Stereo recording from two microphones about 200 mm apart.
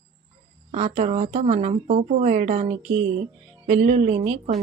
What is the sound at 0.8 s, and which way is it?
Speech, 35° right (ahead or behind).